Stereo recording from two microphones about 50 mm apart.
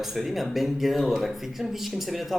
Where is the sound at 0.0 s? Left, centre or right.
Centre.